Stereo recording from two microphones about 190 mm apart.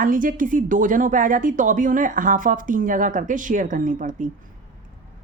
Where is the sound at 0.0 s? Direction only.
45° right (ahead or behind).